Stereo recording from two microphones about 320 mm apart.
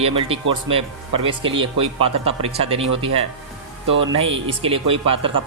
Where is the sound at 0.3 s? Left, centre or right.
Centre.